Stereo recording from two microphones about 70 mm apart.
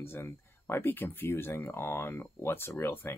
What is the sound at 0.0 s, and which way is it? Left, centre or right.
Speech, left.